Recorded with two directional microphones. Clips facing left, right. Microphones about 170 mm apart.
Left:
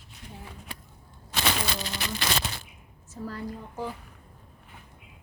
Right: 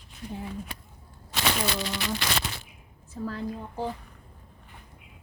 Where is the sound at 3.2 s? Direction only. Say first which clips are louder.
Right 3 dB; 60° right (ahead or behind).